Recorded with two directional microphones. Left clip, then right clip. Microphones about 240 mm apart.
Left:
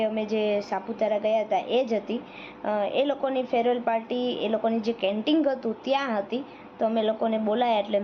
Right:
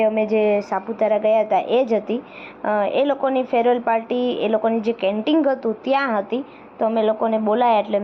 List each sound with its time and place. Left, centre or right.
0.0 s a woman's voice: centre